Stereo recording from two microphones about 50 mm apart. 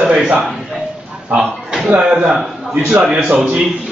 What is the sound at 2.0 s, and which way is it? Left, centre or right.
A man's voice, centre.